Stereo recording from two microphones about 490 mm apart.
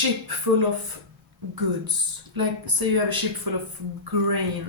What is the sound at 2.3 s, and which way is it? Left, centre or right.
Speech, right.